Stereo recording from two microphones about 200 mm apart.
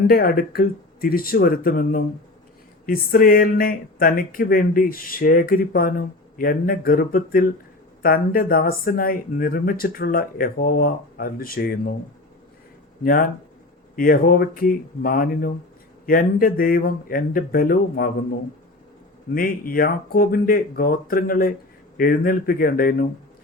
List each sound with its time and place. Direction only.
0.1 s speech: 50° left (ahead or behind)
13.0 s speech: 45° left (ahead or behind)
19.3 s speech: 45° left (ahead or behind)